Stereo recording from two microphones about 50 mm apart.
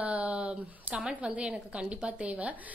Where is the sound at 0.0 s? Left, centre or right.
Right.